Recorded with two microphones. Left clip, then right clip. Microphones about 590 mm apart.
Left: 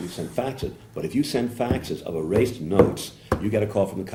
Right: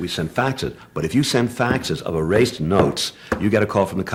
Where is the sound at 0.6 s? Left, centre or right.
Right.